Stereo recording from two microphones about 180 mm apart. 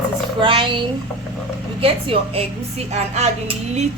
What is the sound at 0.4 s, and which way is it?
A woman's voice, 25° right (ahead or behind).